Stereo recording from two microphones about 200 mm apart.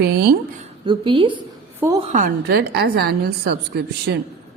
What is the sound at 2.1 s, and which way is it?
A woman's voice, 45° right (ahead or behind).